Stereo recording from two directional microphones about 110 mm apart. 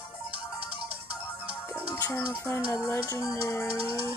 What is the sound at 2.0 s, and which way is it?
Music, 30° left (ahead or behind).